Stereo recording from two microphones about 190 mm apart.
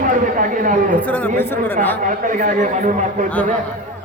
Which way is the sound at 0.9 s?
10° left (ahead or behind).